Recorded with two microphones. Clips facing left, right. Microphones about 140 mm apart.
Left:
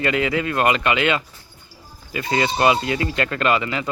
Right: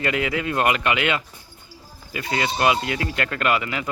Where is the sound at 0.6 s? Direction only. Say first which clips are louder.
Left 2 dB; 20° left (ahead or behind).